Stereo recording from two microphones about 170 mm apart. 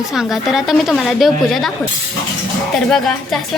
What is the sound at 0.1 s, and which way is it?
A woman's voice, centre (ahead or behind).